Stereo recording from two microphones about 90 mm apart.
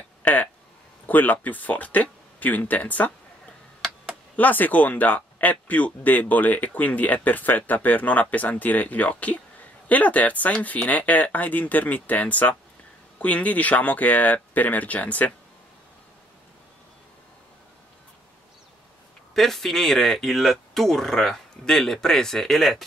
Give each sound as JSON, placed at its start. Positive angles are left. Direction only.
{"t": 0.2, "sound": "a sound", "side_deg": 15}
{"t": 1.0, "sound": "speech", "side_deg": 20}
{"t": 4.4, "sound": "speech", "side_deg": 20}
{"t": 19.3, "sound": "speech", "side_deg": 5}